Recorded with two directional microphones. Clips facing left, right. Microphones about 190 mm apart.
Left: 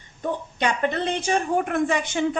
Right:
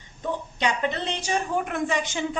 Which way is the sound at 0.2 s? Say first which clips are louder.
Left 2 dB; 50° left (ahead or behind).